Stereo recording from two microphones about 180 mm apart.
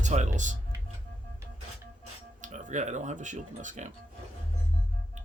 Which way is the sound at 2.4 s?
40° right (ahead or behind).